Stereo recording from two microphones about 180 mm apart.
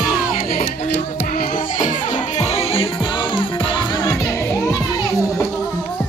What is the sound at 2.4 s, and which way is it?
Music, 35° left (ahead or behind).